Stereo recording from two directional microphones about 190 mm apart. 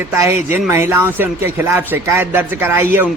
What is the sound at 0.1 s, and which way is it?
Speech, 15° right (ahead or behind).